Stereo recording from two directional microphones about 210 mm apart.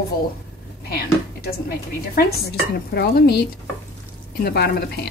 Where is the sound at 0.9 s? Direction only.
45° left (ahead or behind).